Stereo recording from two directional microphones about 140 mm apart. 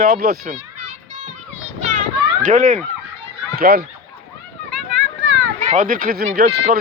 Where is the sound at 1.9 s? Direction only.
65° right (ahead or behind).